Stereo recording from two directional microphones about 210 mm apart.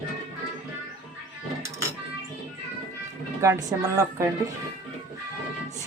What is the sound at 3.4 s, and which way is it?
Speech, 15° right (ahead or behind).